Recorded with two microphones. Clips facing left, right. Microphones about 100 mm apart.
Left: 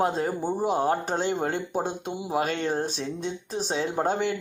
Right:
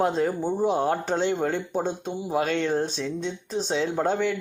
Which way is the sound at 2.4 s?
40° left (ahead or behind).